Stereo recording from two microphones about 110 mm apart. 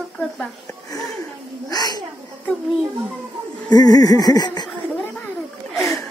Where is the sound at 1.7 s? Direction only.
35° left (ahead or behind).